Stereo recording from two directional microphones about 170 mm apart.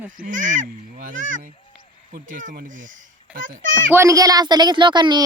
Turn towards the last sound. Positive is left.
turn(degrees=-25)  # may be behind; listen again after turning